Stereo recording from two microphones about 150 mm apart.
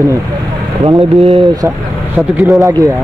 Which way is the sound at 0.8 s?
35° right (ahead or behind).